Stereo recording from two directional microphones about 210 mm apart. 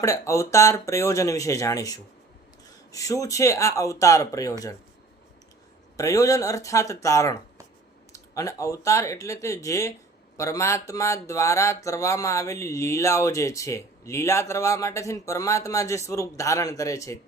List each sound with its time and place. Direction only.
0.0 s speech: 15° left (ahead or behind)
6.0 s speech: 15° left (ahead or behind)